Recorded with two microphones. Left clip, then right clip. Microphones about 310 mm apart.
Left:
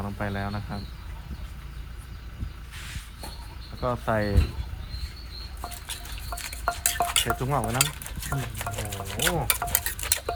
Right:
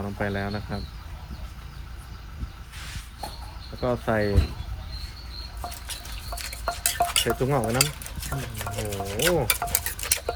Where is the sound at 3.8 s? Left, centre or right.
Centre.